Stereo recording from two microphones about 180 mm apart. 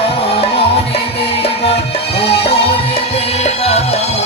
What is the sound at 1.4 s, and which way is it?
Music, 35° left (ahead or behind).